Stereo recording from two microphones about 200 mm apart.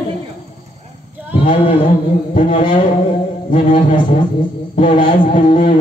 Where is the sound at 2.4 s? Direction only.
25° left (ahead or behind).